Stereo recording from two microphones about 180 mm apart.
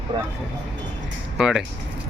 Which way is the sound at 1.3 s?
5° right (ahead or behind).